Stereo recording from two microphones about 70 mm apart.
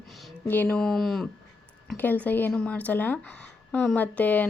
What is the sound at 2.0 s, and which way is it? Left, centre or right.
Speech, left.